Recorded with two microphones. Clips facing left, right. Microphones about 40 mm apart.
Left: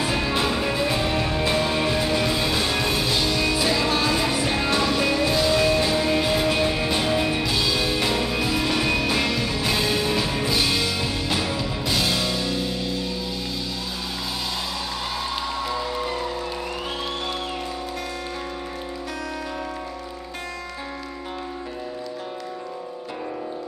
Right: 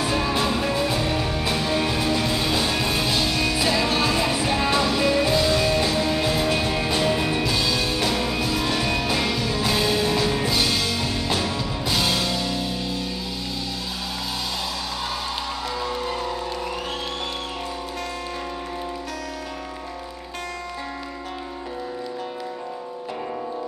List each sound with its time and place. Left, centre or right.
0.1 s music: centre
2.3 s music: centre
4.1 s music: centre
5.9 s music: centre
15.7 s music: centre